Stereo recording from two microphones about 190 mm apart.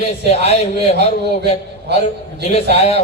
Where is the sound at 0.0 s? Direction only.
35° left (ahead or behind).